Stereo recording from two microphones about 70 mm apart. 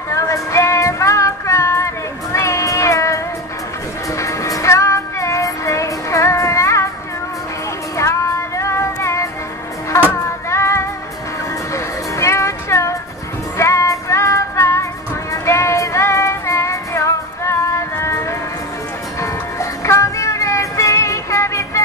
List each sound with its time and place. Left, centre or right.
0.1 s music: left
2.3 s meow: left
4.2 s music: left
8.0 s music: left
19.2 s music: left